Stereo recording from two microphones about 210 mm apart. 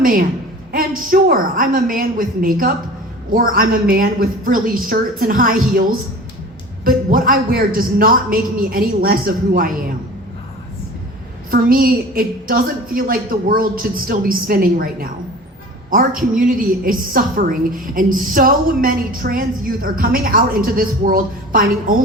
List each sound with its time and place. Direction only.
0.0 s a woman's voice: 40° right (ahead or behind)
11.5 s a woman's voice: 45° right (ahead or behind)